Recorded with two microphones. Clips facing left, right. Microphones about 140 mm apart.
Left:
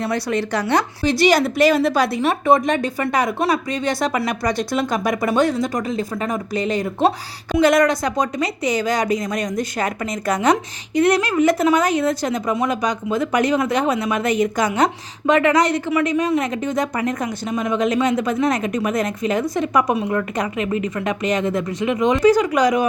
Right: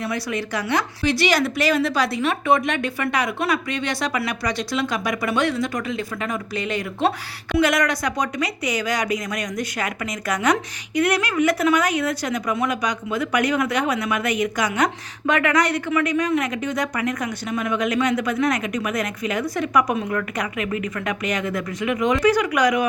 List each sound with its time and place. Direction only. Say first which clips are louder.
0.0 s speech: left 4 dB; 60° left (ahead or behind)
0.7 s a woman's voice: left 2 dB; 45° left (ahead or behind); by 22.9 s 25° left (ahead or behind)